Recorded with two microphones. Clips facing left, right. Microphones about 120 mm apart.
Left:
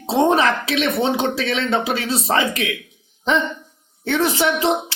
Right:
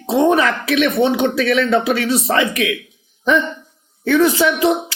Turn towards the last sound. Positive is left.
turn(degrees=25)  # may be behind; listen again after turning